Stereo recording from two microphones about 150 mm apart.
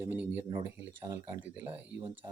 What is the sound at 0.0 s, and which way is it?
Speech, 10° right (ahead or behind).